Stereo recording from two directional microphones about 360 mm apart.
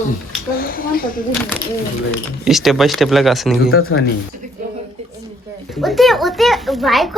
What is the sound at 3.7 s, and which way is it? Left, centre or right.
Speech, left.